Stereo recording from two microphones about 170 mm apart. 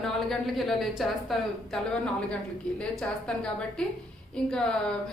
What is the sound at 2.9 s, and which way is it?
A woman's voice, 5° left (ahead or behind).